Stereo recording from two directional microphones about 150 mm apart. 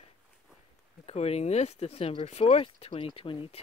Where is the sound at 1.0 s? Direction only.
45° left (ahead or behind).